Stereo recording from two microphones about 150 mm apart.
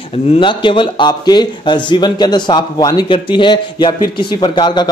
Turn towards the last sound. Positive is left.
turn(degrees=30)  # may be behind; listen again after turning